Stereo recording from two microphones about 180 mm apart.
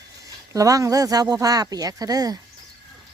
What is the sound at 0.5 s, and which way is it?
Speech, 20° right (ahead or behind).